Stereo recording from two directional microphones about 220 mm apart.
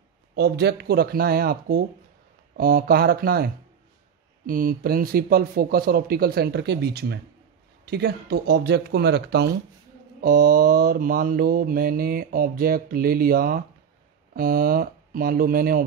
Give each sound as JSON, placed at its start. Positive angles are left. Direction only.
{"t": 0.4, "sound": "speech", "side_deg": -50}
{"t": 2.5, "sound": "mantra", "side_deg": -40}
{"t": 4.5, "sound": "speech", "side_deg": -40}
{"t": 10.2, "sound": "mantra", "side_deg": -40}